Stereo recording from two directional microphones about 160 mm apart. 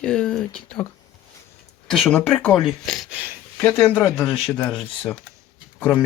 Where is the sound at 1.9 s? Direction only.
5° left (ahead or behind).